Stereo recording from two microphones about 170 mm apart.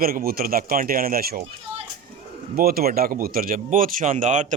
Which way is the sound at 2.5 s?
60° right (ahead or behind).